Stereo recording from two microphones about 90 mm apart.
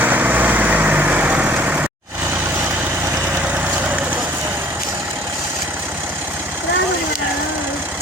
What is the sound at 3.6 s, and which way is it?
Vehicle, 15° right (ahead or behind).